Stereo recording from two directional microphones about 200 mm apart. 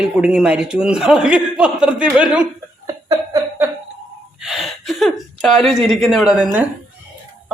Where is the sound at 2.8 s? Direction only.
20° right (ahead or behind).